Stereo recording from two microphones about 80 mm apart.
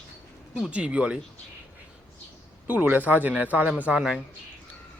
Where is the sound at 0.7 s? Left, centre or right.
Centre.